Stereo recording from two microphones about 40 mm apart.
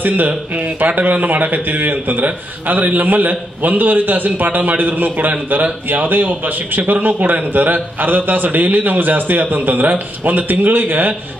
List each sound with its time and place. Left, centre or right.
0.0 s a man's voice: right